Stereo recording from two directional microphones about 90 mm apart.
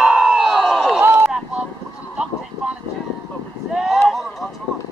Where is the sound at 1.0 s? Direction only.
25° right (ahead or behind).